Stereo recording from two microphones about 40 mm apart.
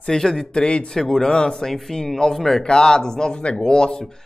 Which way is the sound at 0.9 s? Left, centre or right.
Centre.